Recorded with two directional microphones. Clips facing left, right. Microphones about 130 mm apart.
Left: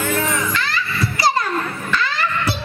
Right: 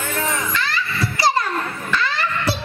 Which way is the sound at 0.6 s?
30° right (ahead or behind).